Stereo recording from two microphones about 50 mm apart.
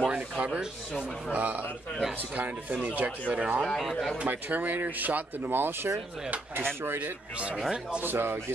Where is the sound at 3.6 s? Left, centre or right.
Centre.